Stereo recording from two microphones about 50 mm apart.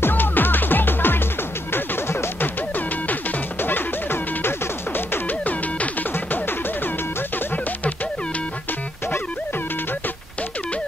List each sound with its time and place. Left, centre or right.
0.0 s music: left
1.7 s music: left
2.4 s music: left
5.4 s music: left
6.1 s music: left